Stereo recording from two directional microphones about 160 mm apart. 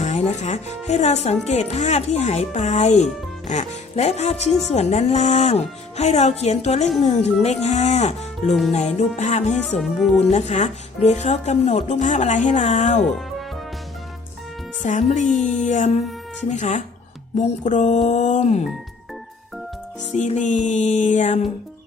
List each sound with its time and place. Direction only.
0.0 s speech: 45° left (ahead or behind)
9.8 s speech: centre (ahead or behind)
10.3 s speech: 45° left (ahead or behind)
14.8 s speech: 50° left (ahead or behind)
20.1 s speech: 50° left (ahead or behind)